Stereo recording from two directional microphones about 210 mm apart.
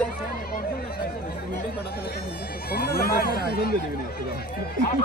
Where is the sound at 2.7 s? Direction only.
45° left (ahead or behind).